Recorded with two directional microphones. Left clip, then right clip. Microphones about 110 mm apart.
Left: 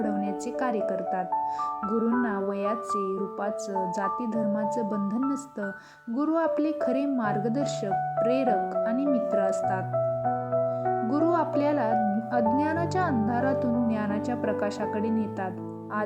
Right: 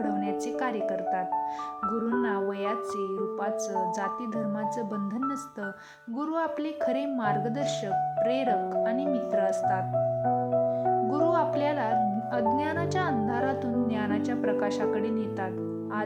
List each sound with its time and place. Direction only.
1.9 s speech: 5° left (ahead or behind)
6.2 s a woman's voice: 30° left (ahead or behind)
11.2 s music: 30° left (ahead or behind)
12.5 s a woman's voice: 30° left (ahead or behind)